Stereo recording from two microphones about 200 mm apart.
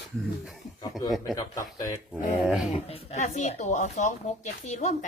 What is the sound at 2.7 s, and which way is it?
Speech, 30° left (ahead or behind).